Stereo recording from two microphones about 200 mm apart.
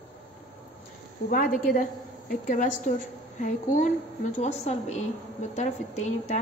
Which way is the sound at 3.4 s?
40° left (ahead or behind).